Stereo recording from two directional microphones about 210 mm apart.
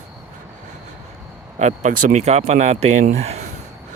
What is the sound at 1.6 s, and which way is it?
Speech, 35° right (ahead or behind).